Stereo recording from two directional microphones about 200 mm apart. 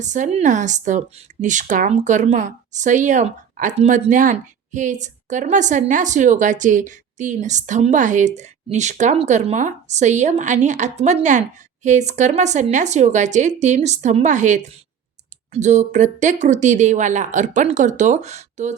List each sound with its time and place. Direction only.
0.0 s speech: 35° right (ahead or behind)